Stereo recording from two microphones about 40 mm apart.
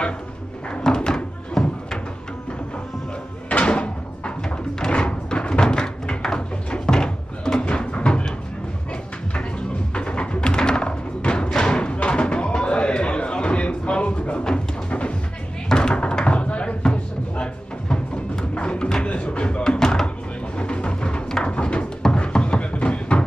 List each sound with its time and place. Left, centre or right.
0.8 s door: centre
3.4 s door: left
4.7 s thunk: left
9.9 s music: left
14.4 s dog: left
15.7 s a sound: left
16.9 s music: left
19.6 s door: centre
20.5 s music: left
21.3 s a sound: centre
21.5 s a sound: left